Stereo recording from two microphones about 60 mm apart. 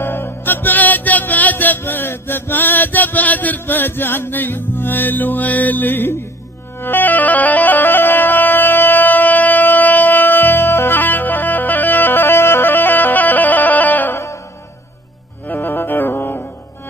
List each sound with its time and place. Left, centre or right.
0.0 s music: left
1.8 s chant: left
6.8 s music: left
15.4 s music: left